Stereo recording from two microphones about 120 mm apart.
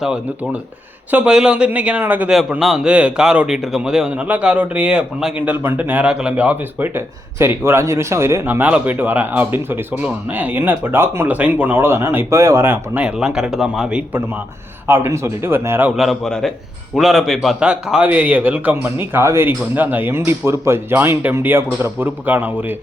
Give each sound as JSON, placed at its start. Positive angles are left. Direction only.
{"t": 0.0, "sound": "a man's voice", "side_deg": -10}
{"t": 2.3, "sound": "a man's voice", "side_deg": -5}
{"t": 14.8, "sound": "speech", "side_deg": -20}
{"t": 16.0, "sound": "a man's voice", "side_deg": 0}